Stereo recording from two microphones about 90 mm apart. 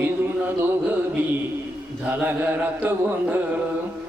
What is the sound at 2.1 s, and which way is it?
Speech, 20° right (ahead or behind).